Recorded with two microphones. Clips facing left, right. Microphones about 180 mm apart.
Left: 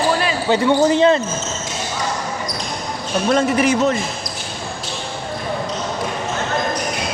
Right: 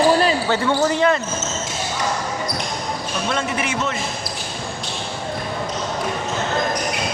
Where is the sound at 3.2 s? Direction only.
40° left (ahead or behind).